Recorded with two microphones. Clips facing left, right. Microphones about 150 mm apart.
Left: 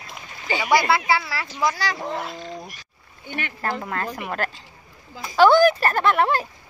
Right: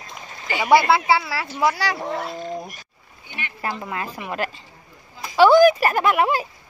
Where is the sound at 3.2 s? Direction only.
55° left (ahead or behind).